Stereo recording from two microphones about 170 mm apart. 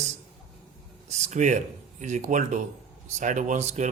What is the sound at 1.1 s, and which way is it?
Speech, 45° right (ahead or behind).